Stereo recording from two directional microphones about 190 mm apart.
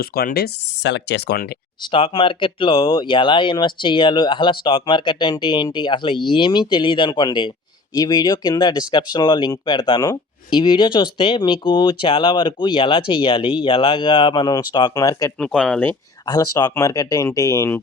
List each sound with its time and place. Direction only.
0.0 s speech: 55° left (ahead or behind)
1.8 s speech: 25° left (ahead or behind)
15.4 s speech: 5° left (ahead or behind)
16.2 s speech: 20° left (ahead or behind)